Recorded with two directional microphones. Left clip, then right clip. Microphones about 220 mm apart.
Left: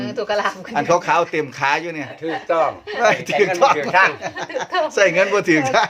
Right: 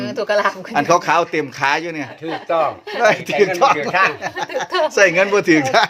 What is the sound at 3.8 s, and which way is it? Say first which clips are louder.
Speech: left 1 dB; 10° left (ahead or behind).